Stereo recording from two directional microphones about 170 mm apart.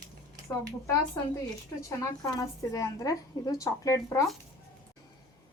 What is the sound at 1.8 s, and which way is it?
A woman's voice, 20° left (ahead or behind).